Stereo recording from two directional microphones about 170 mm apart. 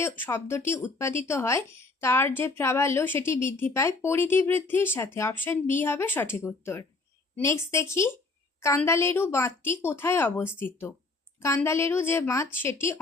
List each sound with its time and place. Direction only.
0.0 s speech: 15° left (ahead or behind)